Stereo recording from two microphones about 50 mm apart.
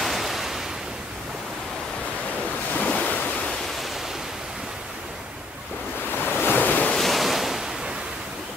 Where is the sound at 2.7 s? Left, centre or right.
Left.